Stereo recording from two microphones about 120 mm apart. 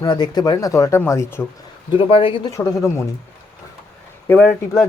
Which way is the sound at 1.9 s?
50° left (ahead or behind).